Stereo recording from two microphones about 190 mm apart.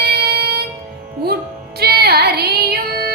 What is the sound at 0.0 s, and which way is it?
Music, 55° right (ahead or behind).